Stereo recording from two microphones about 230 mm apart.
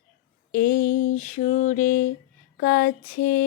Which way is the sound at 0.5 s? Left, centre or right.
Left.